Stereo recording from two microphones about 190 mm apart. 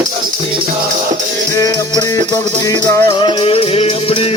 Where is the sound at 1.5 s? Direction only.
20° left (ahead or behind).